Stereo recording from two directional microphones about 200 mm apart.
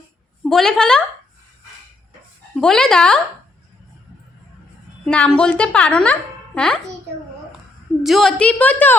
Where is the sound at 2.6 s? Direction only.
5° left (ahead or behind).